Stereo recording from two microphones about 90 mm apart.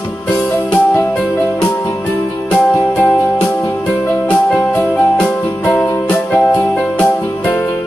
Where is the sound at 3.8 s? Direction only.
15° left (ahead or behind).